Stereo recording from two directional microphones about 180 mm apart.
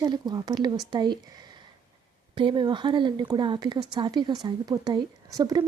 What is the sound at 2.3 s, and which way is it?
Speech, 25° right (ahead or behind).